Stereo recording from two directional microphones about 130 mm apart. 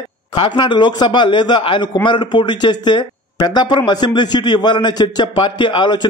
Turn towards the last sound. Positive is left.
turn(degrees=35)  # may be behind; listen again after turning